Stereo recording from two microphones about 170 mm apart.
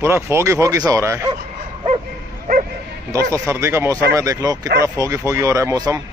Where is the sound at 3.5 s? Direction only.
15° right (ahead or behind).